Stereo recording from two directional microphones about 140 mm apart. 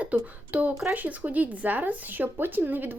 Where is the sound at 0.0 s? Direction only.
10° right (ahead or behind).